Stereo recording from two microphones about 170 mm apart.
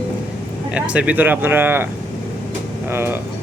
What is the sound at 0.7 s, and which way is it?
Speech, 5° right (ahead or behind).